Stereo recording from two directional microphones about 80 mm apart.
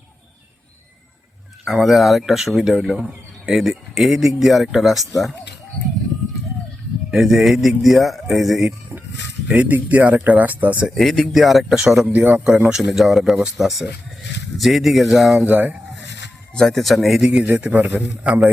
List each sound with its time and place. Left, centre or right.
1.6 s speech: centre
7.1 s speech: centre
9.5 s a man's voice: centre
10.9 s speech: centre
12.1 s speech: centre
15.4 s a man's voice: centre
16.6 s speech: centre
17.4 s a man's voice: right